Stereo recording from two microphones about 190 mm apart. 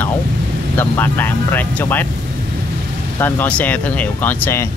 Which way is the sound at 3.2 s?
10° left (ahead or behind).